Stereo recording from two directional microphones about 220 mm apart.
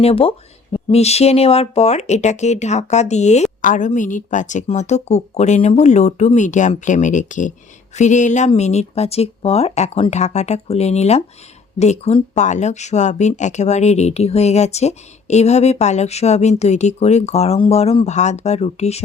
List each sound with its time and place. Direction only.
0.0 s speech: 25° left (ahead or behind)